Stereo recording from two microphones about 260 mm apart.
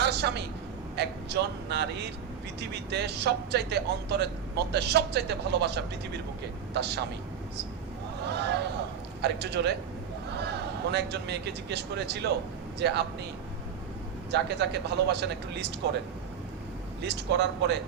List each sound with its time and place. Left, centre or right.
0.0 s a sound: right
0.9 s speech: right
8.3 s speech: right
10.9 s speech: right
14.3 s speech: right
17.0 s speech: right